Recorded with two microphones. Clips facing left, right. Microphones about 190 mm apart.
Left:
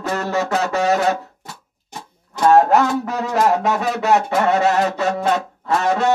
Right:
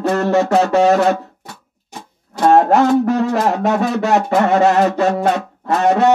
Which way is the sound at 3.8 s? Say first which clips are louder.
Right 2 dB; 45° right (ahead or behind).